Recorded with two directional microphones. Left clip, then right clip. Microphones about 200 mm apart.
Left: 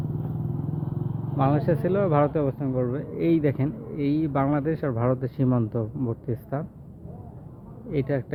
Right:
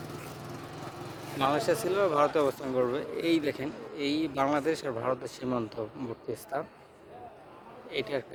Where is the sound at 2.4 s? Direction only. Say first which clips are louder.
Left 1 dB; 30° right (ahead or behind); by 6.4 s 10° right (ahead or behind).